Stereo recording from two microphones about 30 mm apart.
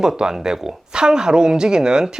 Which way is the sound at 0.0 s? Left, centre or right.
Centre.